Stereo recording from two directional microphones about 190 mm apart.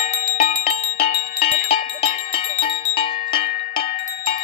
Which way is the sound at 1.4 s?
30° left (ahead or behind).